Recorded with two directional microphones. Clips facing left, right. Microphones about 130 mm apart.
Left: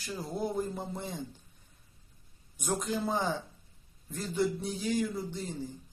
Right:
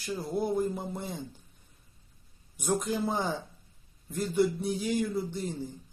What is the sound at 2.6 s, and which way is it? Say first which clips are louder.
Speech: right 3 dB; 15° right (ahead or behind).